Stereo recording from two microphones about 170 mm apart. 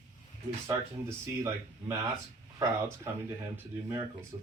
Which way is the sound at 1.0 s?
15° right (ahead or behind).